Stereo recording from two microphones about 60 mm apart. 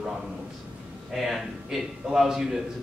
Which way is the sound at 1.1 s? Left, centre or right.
Centre.